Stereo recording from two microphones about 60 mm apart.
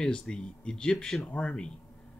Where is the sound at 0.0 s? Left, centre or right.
Centre.